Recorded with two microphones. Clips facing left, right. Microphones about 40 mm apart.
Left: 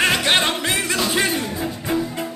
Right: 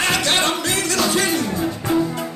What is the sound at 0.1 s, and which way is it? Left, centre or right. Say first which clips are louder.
Music: left 1 dB; left.